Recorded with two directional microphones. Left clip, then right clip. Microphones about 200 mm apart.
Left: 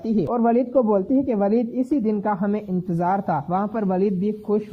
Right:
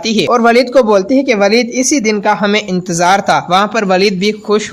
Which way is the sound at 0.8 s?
40° right (ahead or behind).